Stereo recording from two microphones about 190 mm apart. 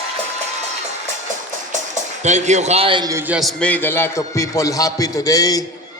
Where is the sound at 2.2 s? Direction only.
35° right (ahead or behind); by 3.2 s 20° right (ahead or behind).